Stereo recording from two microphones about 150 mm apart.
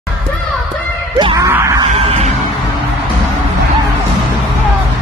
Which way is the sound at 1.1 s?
25° right (ahead or behind).